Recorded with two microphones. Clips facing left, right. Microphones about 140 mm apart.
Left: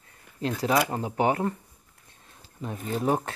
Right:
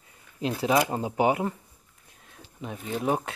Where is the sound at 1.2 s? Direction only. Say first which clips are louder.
Even; 15° right (ahead or behind).